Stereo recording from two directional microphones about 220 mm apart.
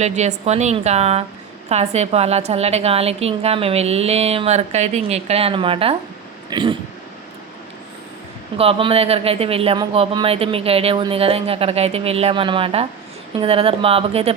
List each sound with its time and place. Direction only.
0.0 s speech: 30° right (ahead or behind)
6.5 s a sound: 20° right (ahead or behind)
8.5 s speech: 25° right (ahead or behind)